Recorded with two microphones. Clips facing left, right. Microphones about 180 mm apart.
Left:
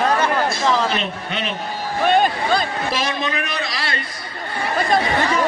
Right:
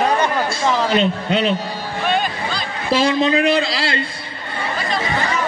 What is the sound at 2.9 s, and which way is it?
A man's voice, 30° right (ahead or behind).